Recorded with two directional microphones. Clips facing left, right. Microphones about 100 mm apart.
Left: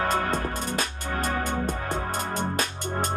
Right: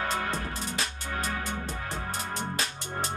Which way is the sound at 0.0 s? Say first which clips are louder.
Left 5 dB; 45° left (ahead or behind).